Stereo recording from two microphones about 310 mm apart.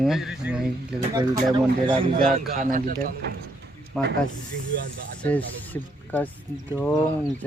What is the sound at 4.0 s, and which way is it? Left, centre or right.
Speech, centre.